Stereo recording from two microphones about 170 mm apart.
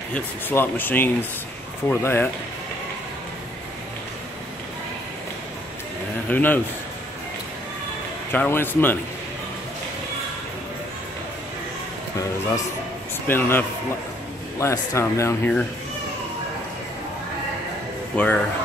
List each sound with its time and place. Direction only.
0.1 s speech: 10° left (ahead or behind)
6.2 s speech: 10° left (ahead or behind)
8.3 s speech: 10° left (ahead or behind)
13.3 s speech: 10° left (ahead or behind)
18.1 s speech: 10° left (ahead or behind)